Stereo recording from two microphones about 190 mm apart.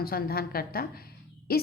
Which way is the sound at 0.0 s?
55° left (ahead or behind).